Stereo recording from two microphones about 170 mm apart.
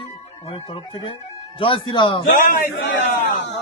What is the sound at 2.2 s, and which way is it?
Speech, 55° left (ahead or behind).